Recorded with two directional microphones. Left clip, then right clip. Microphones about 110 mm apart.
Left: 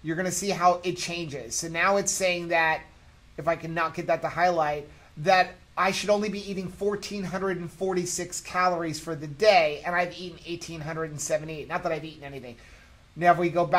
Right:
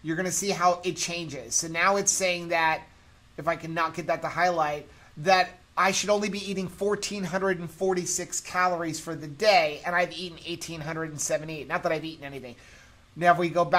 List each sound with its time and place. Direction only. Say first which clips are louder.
0.0 s speech: even; 20° right (ahead or behind)
6.3 s speech: right 2 dB; 60° right (ahead or behind)
7.9 s speech: right 1 dB; 15° right (ahead or behind)
9.9 s a woman's voice: right 1 dB; 45° right (ahead or behind)
11.8 s speech: right 3 dB; 60° right (ahead or behind)
12.2 s a man's voice: right 1 dB; 40° right (ahead or behind)